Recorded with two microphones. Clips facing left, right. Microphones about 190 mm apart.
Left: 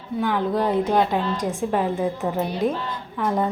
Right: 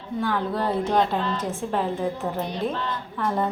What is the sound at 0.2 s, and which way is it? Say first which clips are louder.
A woman's voice: left 3 dB; 15° left (ahead or behind).